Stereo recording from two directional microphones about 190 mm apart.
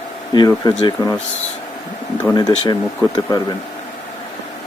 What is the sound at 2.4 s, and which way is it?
Speech, 20° left (ahead or behind).